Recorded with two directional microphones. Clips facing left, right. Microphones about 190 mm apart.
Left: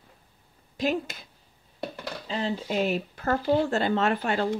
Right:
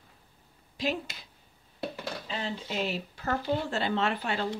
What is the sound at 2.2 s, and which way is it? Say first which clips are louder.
Speech: left 9 dB; 35° left (ahead or behind).